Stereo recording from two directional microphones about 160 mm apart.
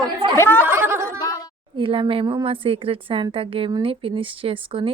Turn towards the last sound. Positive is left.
turn(degrees=-35)  # may be behind; listen again after turning